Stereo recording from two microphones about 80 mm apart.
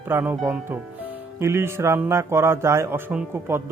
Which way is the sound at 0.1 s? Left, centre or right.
Right.